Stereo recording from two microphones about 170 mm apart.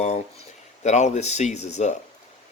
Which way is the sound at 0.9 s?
45° left (ahead or behind).